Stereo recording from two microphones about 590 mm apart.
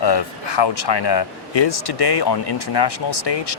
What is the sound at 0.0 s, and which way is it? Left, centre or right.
Speech, left.